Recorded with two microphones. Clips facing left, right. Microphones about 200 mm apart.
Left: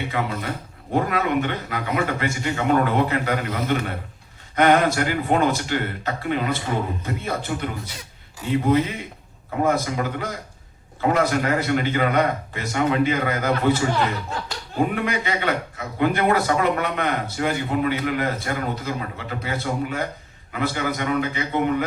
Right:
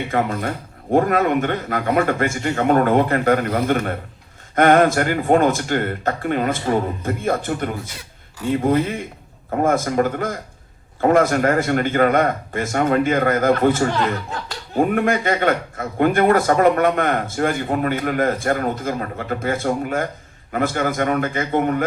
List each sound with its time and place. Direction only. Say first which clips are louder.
0.1 s a man's voice: right 5 dB; 50° right (ahead or behind)
9.6 s a man's voice: right 5 dB; 50° right (ahead or behind)